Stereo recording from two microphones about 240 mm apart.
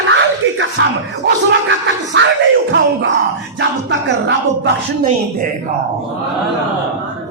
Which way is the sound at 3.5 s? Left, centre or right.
Right.